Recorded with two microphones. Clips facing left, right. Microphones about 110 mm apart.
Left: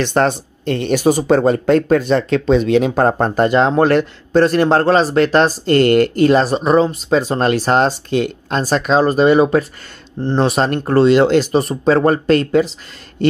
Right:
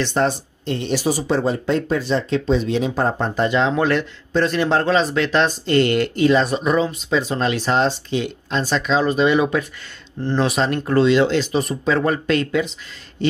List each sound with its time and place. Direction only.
0.0 s speech: 60° left (ahead or behind); by 6.5 s 45° left (ahead or behind)
6.5 s speech: 35° left (ahead or behind)
10.9 s speech: 45° left (ahead or behind)